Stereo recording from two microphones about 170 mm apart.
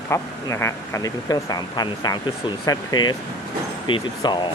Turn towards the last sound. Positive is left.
turn(degrees=25)  # may be behind; listen again after turning